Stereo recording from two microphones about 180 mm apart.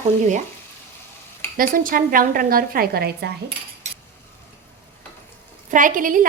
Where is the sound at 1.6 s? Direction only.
50° right (ahead or behind).